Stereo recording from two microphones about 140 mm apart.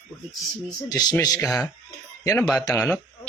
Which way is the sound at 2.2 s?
25° left (ahead or behind).